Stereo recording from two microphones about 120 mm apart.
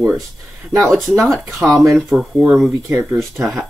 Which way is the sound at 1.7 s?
25° right (ahead or behind).